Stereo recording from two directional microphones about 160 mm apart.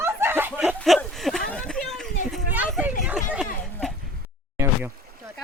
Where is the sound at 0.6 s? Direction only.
Centre (ahead or behind).